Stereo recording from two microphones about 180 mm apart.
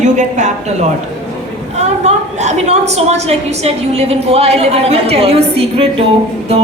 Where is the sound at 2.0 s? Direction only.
40° right (ahead or behind).